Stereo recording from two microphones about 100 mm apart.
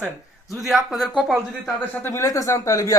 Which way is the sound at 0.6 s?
Centre (ahead or behind).